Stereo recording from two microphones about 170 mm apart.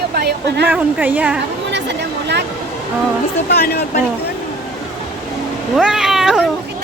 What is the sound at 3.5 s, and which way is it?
Speech, 65° left (ahead or behind).